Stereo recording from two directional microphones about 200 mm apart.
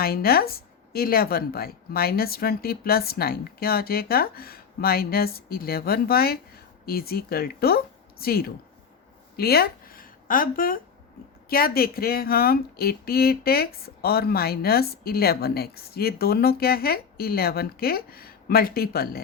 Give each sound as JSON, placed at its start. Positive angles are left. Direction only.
{"t": 0.0, "sound": "speech", "side_deg": 50}
{"t": 9.3, "sound": "a sound", "side_deg": 50}
{"t": 11.4, "sound": "speech", "side_deg": 50}